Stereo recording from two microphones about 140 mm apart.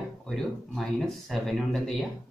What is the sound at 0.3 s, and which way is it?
Speech, centre (ahead or behind).